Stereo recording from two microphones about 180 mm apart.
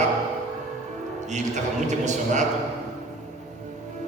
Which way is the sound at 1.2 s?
40° right (ahead or behind).